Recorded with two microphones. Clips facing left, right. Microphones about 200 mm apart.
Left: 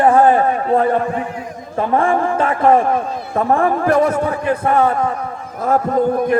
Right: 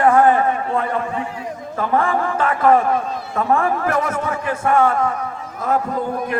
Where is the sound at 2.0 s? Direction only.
30° left (ahead or behind).